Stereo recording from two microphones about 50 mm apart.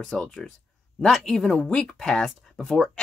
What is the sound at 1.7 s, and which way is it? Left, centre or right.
Speech, centre.